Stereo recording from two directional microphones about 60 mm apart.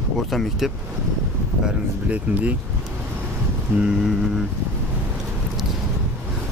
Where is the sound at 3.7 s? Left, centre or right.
Right.